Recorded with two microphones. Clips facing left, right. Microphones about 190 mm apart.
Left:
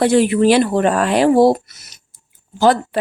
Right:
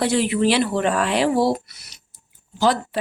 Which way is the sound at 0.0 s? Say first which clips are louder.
Left 6 dB; 50° left (ahead or behind).